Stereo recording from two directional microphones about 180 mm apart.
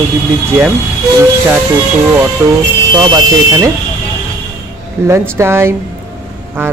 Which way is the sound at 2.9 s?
25° right (ahead or behind).